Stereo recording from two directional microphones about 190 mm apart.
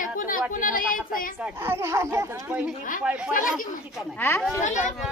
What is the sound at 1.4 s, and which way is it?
Speech, 15° right (ahead or behind).